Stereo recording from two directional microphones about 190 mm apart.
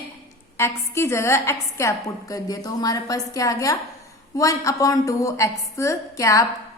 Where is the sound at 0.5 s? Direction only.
15° left (ahead or behind).